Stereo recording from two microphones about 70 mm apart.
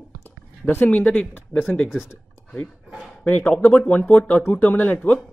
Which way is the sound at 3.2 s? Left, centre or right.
Left.